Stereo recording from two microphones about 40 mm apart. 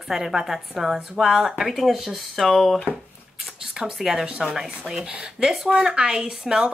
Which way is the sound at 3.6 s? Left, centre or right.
Centre.